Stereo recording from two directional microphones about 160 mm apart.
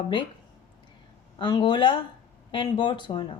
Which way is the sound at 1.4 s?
30° left (ahead or behind).